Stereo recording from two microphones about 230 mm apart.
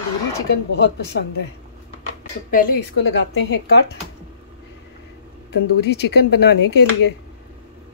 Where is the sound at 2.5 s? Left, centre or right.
Left.